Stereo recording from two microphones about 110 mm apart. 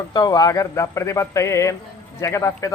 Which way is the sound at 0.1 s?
35° left (ahead or behind).